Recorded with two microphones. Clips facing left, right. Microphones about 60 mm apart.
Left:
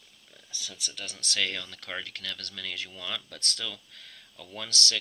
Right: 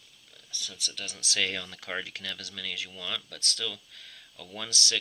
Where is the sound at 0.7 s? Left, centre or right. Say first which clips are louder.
Right 1 dB; centre.